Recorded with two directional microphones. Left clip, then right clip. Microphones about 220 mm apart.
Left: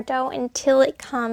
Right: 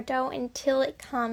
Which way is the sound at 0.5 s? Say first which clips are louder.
Left 9 dB; 30° left (ahead or behind).